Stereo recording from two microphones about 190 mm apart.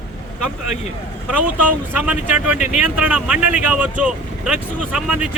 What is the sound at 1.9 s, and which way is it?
Speech, 10° right (ahead or behind).